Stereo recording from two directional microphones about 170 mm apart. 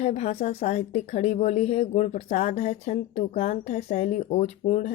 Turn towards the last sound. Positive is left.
turn(degrees=40)  # may be behind; listen again after turning